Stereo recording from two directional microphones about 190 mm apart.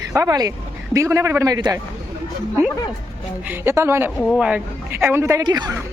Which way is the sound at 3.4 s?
10° right (ahead or behind).